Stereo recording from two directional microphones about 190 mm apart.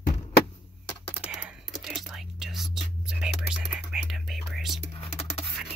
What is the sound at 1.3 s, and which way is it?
Whispering, 5° right (ahead or behind).